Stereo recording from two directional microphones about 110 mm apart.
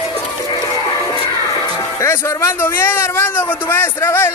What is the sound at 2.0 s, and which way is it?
A man's voice, 25° left (ahead or behind).